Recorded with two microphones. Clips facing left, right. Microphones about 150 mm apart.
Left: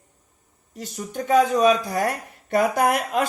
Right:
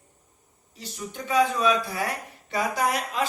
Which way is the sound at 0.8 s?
50° left (ahead or behind).